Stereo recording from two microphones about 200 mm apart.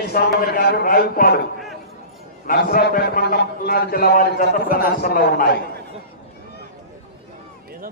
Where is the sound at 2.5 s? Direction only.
45° left (ahead or behind).